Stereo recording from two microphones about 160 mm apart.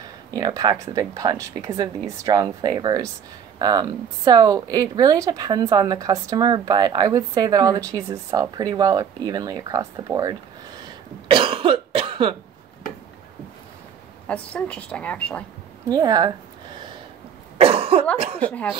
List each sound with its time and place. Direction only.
0.3 s a woman's voice: 25° right (ahead or behind)
11.2 s cough: 35° right (ahead or behind)
14.2 s speech: 10° left (ahead or behind)
15.9 s a woman's voice: 25° right (ahead or behind)
17.6 s cough: 40° right (ahead or behind)